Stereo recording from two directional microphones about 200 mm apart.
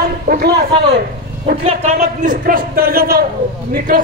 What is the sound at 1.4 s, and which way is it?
A man's voice, 35° right (ahead or behind).